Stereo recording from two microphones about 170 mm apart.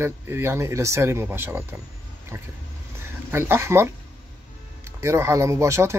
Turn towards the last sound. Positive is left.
turn(degrees=-15)  # may be behind; listen again after turning